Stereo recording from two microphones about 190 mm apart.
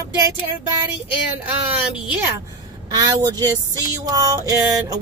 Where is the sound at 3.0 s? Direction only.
20° right (ahead or behind).